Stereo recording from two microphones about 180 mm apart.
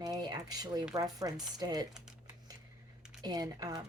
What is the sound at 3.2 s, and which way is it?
Speech, 20° right (ahead or behind).